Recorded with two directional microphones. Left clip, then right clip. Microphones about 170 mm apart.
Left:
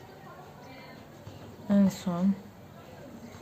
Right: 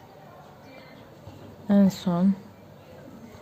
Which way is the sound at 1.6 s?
35° right (ahead or behind).